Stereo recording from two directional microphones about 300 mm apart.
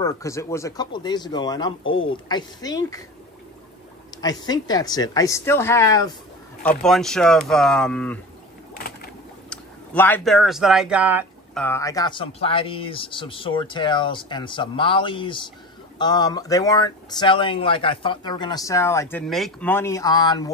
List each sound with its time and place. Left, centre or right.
0.0 s speech: centre
1.8 s speech: left
2.2 s speech: centre
4.1 s a sound: centre
4.5 s speech: centre
8.7 s a sound: left
9.5 s speech: centre
11.6 s speech: centre